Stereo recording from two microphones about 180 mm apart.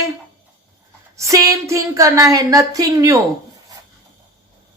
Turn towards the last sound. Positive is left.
turn(degrees=-20)  # may be behind; listen again after turning